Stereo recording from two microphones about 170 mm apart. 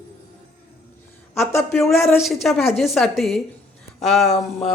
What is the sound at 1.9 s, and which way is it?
Speech, 15° left (ahead or behind).